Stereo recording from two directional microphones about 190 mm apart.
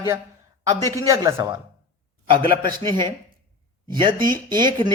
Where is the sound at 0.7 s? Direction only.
20° right (ahead or behind).